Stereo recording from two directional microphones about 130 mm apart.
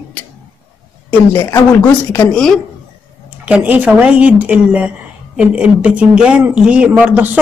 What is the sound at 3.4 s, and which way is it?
Speech, 10° right (ahead or behind).